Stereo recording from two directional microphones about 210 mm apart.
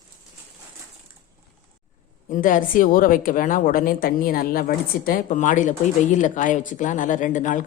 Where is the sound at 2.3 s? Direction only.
40° left (ahead or behind).